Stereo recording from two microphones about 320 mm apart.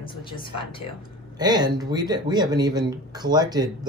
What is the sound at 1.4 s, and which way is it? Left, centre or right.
Speech, centre.